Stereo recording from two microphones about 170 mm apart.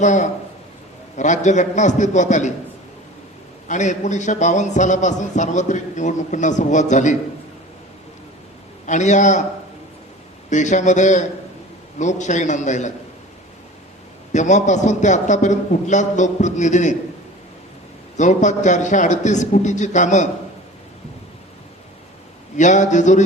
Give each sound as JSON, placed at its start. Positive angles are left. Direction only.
{"t": 0.0, "sound": "a man's voice", "side_deg": 45}
{"t": 3.7, "sound": "a man's voice", "side_deg": 45}
{"t": 8.9, "sound": "a man's voice", "side_deg": 45}
{"t": 10.5, "sound": "a man's voice", "side_deg": 45}
{"t": 14.3, "sound": "a man's voice", "side_deg": 45}
{"t": 18.2, "sound": "a man's voice", "side_deg": 45}
{"t": 22.5, "sound": "a man's voice", "side_deg": 45}